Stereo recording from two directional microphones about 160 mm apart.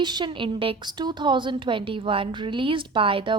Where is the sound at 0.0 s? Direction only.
25° right (ahead or behind).